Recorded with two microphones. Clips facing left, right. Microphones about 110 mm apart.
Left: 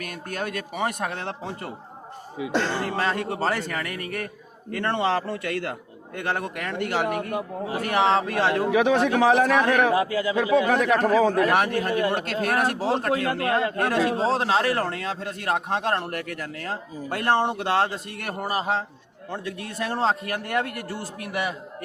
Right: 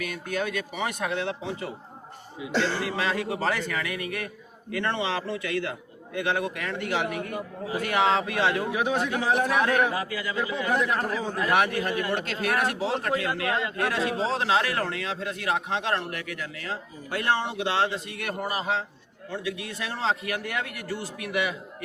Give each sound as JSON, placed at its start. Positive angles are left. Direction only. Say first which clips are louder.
{"t": 0.0, "sound": "a man's voice", "louder": "right 1 dB", "side_deg": 45}
{"t": 8.7, "sound": "a man's voice", "louder": "left 6 dB", "side_deg": 90}
{"t": 11.5, "sound": "a man's voice", "louder": "left 2 dB", "side_deg": 40}